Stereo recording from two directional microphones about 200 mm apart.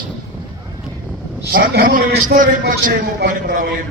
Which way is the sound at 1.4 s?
50° right (ahead or behind).